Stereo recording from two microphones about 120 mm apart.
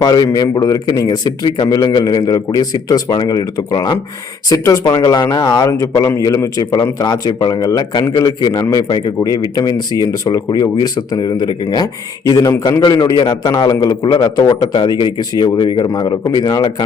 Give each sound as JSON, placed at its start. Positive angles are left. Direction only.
{"t": 0.0, "sound": "a man's voice", "side_deg": 35}